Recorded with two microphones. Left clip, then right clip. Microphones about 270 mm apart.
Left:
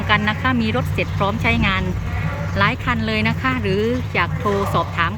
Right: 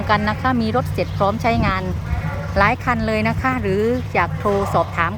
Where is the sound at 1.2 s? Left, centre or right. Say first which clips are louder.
Right 2 dB; centre.